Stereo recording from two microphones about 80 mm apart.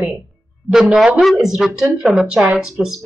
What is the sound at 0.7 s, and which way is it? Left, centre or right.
Speech, centre.